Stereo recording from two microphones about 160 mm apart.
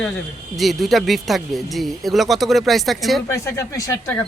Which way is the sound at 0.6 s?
Centre (ahead or behind).